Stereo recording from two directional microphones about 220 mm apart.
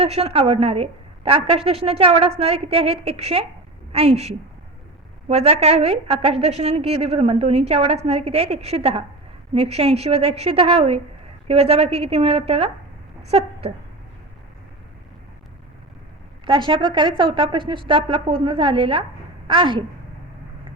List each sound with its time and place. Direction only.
0.0 s a woman's voice: 25° right (ahead or behind)
13.2 s a sound: 25° right (ahead or behind)
16.5 s a woman's voice: 20° right (ahead or behind)